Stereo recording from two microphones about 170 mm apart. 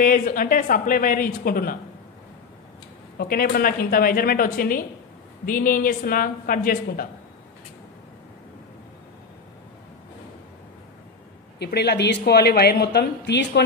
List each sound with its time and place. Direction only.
0.0 s speech: 55° left (ahead or behind)
3.2 s speech: 60° left (ahead or behind)
11.6 s a woman's voice: 70° left (ahead or behind)